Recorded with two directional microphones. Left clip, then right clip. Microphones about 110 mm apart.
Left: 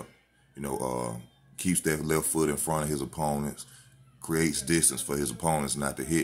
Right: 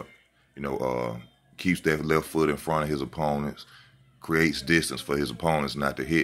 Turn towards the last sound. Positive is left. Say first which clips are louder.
# right 4 dB
turn(degrees=30)  # may be behind; listen again after turning